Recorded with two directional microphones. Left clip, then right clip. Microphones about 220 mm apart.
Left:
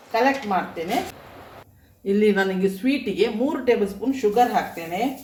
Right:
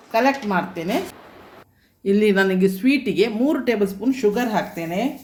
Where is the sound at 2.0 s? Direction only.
45° right (ahead or behind).